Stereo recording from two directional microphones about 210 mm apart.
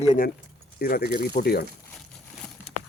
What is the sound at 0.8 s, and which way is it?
Speech, 45° left (ahead or behind).